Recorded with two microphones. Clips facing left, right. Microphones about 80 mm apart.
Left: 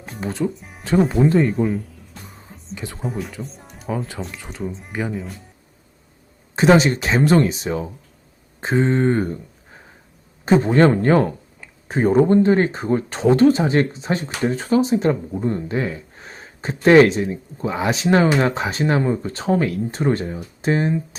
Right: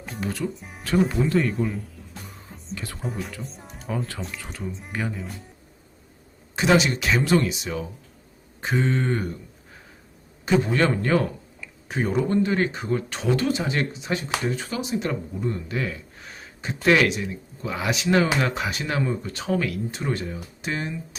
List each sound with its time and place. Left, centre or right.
0.2 s speech: left
0.5 s speech: centre
1.2 s a man's voice: left
1.5 s speech: centre
2.7 s music: left
3.0 s speech: centre
5.1 s speech: centre
6.6 s a man's voice: left
10.4 s a man's voice: left